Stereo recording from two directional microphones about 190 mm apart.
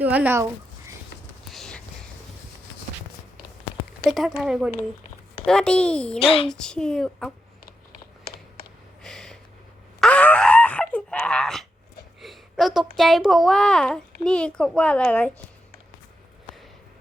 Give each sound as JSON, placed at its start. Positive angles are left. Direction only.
{"t": 0.0, "sound": "speech", "side_deg": -10}
{"t": 1.5, "sound": "a sound", "side_deg": 0}
{"t": 4.1, "sound": "a woman's voice", "side_deg": 0}
{"t": 6.1, "sound": "speech", "side_deg": 30}
{"t": 6.5, "sound": "a woman's voice", "side_deg": 5}
{"t": 9.0, "sound": "a sound", "side_deg": 5}
{"t": 10.0, "sound": "groan", "side_deg": 5}
{"t": 12.2, "sound": "a woman's voice", "side_deg": 0}